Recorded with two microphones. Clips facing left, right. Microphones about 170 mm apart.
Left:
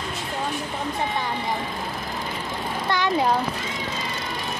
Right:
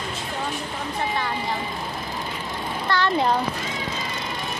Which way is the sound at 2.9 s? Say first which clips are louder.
Right 1 dB; 20° left (ahead or behind).